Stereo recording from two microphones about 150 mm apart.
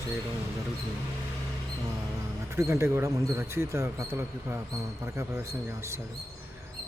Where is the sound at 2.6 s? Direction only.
20° right (ahead or behind).